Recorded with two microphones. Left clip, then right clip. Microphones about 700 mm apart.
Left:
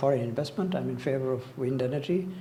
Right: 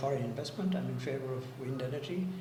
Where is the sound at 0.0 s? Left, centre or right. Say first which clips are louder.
Left 8 dB; left.